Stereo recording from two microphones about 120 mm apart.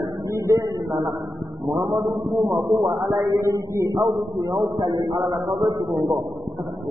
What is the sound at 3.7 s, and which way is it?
Speech, 30° right (ahead or behind).